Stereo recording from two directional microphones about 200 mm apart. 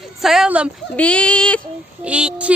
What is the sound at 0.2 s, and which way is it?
Speech, centre (ahead or behind).